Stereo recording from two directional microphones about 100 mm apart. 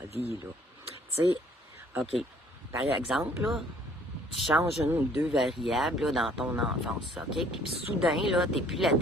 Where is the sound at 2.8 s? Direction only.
5° right (ahead or behind).